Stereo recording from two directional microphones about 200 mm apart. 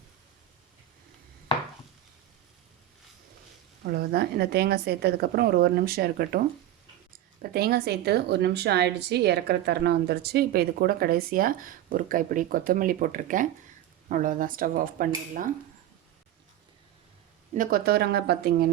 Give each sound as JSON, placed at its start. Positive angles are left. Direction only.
{"t": 3.8, "sound": "a woman's voice", "side_deg": -50}
{"t": 7.5, "sound": "a woman's voice", "side_deg": -50}
{"t": 17.5, "sound": "a woman's voice", "side_deg": -45}